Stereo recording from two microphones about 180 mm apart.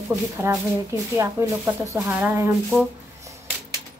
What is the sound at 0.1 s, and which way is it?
Speech, 15° right (ahead or behind).